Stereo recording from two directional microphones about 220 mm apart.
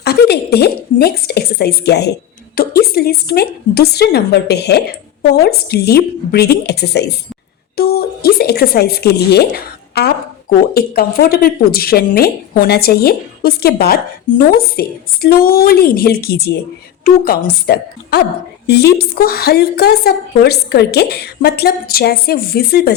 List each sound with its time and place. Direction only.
0.0 s a woman's voice: 45° left (ahead or behind)
7.8 s a sound: 45° left (ahead or behind)
10.8 s a woman's voice: 45° left (ahead or behind)